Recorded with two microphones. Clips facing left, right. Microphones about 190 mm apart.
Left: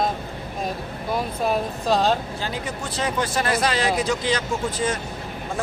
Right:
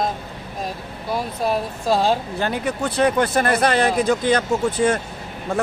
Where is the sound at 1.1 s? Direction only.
Centre (ahead or behind).